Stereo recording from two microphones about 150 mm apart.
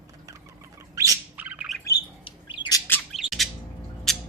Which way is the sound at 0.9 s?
20° right (ahead or behind).